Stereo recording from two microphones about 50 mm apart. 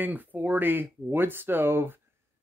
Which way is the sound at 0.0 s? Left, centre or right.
Right.